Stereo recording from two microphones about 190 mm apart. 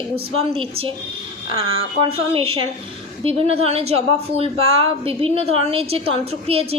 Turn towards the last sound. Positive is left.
turn(degrees=-30)  # may be behind; listen again after turning